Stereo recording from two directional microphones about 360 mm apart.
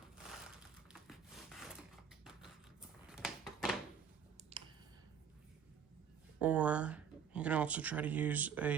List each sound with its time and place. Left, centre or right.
1.0 s wood: centre
3.1 s a sound: centre
4.5 s clicking: centre
6.4 s speech: centre